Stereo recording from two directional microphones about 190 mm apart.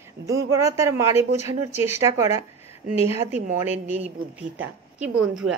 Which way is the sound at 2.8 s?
45° right (ahead or behind).